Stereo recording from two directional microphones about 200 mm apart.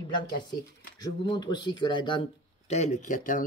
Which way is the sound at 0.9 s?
20° left (ahead or behind).